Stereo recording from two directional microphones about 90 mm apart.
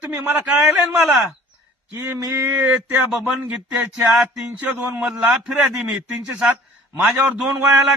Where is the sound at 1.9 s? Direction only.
25° right (ahead or behind).